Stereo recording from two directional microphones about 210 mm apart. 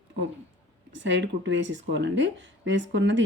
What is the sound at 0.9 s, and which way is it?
Speech, 60° right (ahead or behind).